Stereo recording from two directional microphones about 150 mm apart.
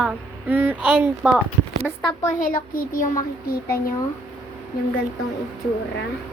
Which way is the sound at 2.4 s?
65° left (ahead or behind).